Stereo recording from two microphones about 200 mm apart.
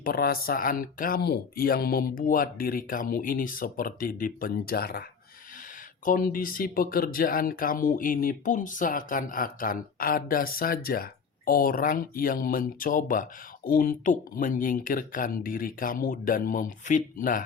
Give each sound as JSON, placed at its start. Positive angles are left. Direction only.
{"t": 0.0, "sound": "speech", "side_deg": 45}
{"t": 6.1, "sound": "speech", "side_deg": 45}